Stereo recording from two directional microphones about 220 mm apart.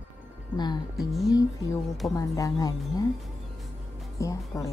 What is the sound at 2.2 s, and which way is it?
Speech, 15° left (ahead or behind).